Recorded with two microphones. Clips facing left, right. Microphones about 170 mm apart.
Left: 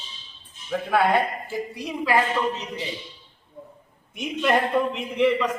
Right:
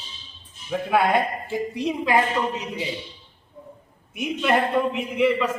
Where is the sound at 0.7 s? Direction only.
10° right (ahead or behind).